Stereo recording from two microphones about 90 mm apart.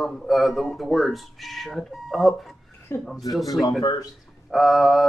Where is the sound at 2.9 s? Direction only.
25° left (ahead or behind).